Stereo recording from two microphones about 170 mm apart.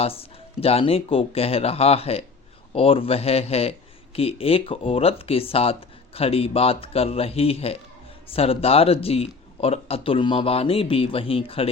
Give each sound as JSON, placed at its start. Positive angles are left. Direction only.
{"t": 0.0, "sound": "speech", "side_deg": 35}